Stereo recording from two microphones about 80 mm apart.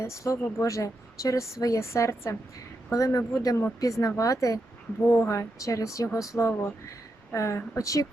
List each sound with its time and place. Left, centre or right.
0.0 s a woman's voice: left